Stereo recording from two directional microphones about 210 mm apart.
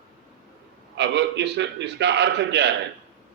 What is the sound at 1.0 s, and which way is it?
A man's voice, 55° right (ahead or behind).